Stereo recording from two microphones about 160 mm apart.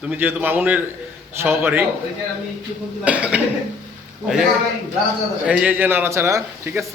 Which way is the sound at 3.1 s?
10° right (ahead or behind).